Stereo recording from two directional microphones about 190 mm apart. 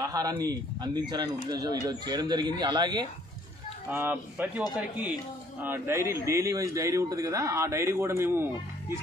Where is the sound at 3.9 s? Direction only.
10° right (ahead or behind).